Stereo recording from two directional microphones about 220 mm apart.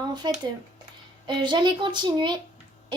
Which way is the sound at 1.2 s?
20° right (ahead or behind).